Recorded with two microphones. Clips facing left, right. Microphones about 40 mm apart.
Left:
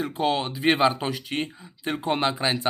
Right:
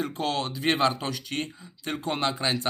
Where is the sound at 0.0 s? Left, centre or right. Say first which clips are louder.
Left 4 dB; centre.